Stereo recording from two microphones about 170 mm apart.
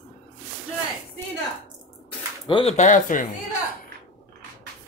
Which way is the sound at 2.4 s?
30° left (ahead or behind).